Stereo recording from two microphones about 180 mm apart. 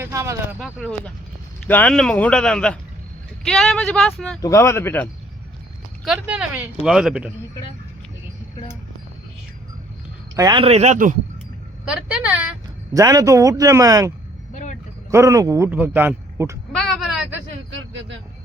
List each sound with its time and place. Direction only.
0.0 s a sound: 15° right (ahead or behind)
0.6 s speech: centre (ahead or behind)
4.4 s speech: 15° left (ahead or behind)
6.2 s a man's voice: 5° right (ahead or behind)
10.3 s speech: 25° right (ahead or behind); by 11.2 s 45° right (ahead or behind)
11.9 s a man's voice: 5° right (ahead or behind)
12.9 s a man's voice: 20° right (ahead or behind)
14.5 s a sound: 40° left (ahead or behind)
15.1 s a man's voice: 15° right (ahead or behind)
16.7 s a sound: centre (ahead or behind)
17.7 s vehicle: 90° right